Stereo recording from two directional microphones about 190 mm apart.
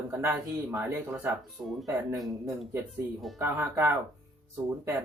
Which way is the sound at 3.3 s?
10° right (ahead or behind).